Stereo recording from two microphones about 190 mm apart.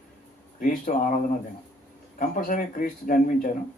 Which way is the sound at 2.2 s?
45° left (ahead or behind).